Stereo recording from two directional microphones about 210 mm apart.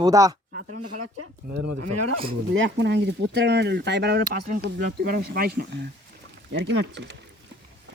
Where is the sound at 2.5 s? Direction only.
55° right (ahead or behind).